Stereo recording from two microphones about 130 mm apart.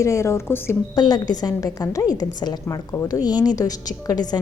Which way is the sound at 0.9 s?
30° left (ahead or behind).